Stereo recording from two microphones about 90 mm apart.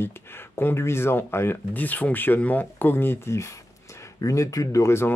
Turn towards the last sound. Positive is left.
turn(degrees=30)  # may be behind; listen again after turning